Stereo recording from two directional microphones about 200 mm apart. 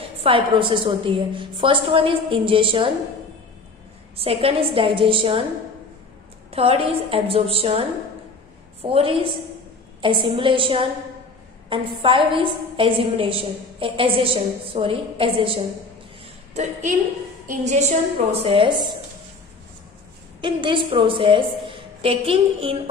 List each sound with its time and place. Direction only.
0.2 s a woman's voice: 25° right (ahead or behind)
4.2 s a woman's voice: 30° right (ahead or behind)
6.5 s a woman's voice: 30° right (ahead or behind)
8.8 s a woman's voice: 25° right (ahead or behind)
20.3 s a woman's voice: 25° right (ahead or behind)